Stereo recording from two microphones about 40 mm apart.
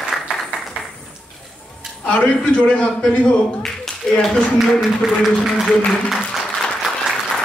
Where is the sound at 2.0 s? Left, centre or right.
Left.